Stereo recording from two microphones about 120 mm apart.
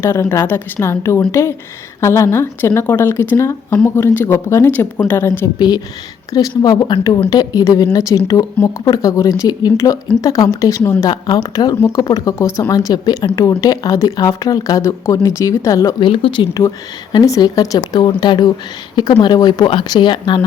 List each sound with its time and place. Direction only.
0.0 s speech: 20° left (ahead or behind)
5.5 s speech: 35° left (ahead or behind)
11.1 s speech: 35° left (ahead or behind)
16.0 s speech: 45° left (ahead or behind)
16.6 s speech: 30° left (ahead or behind)